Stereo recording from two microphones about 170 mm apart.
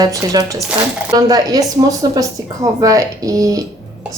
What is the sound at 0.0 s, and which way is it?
Speech, 20° right (ahead or behind).